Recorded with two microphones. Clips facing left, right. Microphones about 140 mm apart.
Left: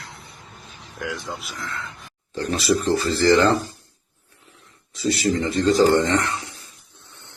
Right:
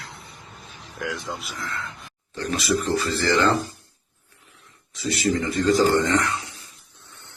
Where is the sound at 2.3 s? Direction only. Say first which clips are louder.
Left 3 dB; 35° left (ahead or behind).